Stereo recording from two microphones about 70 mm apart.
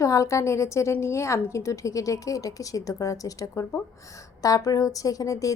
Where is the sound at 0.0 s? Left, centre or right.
Left.